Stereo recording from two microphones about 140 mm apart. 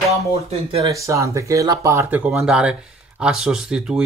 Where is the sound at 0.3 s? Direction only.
45° right (ahead or behind).